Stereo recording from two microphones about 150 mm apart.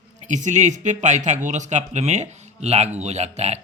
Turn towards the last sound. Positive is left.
turn(degrees=-50)  # may be behind; listen again after turning